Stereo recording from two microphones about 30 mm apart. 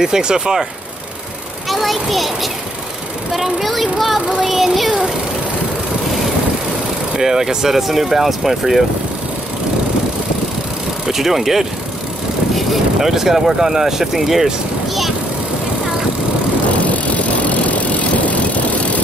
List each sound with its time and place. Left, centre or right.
0.0 s speech: right
1.7 s a child's voice: centre
3.6 s a child's voice: centre
4.4 s a sound: centre
7.2 s speech: centre
11.1 s speech: centre
12.5 s vehicle: centre
13.1 s speech: centre
16.8 s vehicle: left